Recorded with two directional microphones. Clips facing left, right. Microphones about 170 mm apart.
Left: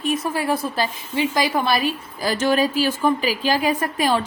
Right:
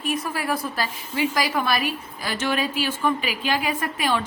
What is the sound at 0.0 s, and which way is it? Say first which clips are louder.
A woman's voice: left 4 dB; 25° left (ahead or behind).